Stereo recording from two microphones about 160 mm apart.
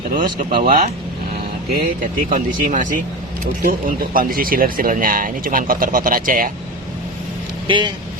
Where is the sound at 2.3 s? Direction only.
55° right (ahead or behind).